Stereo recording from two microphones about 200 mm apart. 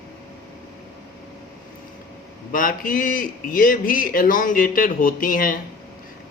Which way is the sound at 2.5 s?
45° left (ahead or behind).